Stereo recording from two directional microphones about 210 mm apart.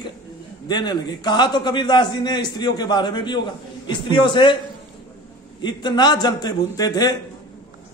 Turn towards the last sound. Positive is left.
turn(degrees=20)  # may be behind; listen again after turning